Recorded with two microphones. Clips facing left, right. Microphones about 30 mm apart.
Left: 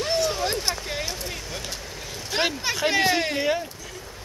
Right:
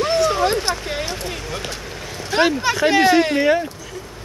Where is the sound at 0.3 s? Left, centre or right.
Right.